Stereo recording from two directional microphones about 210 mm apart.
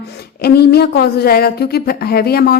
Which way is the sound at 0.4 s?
50° left (ahead or behind).